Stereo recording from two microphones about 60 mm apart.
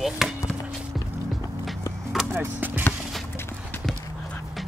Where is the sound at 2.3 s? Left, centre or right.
Right.